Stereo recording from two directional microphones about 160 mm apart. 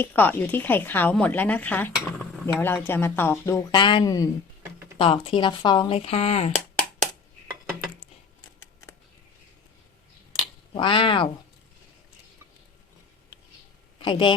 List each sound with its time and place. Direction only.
0.0 s cutlery: 10° left (ahead or behind)
4.9 s speech: 30° left (ahead or behind)
10.8 s speech: 30° left (ahead or behind)
14.0 s speech: 30° left (ahead or behind)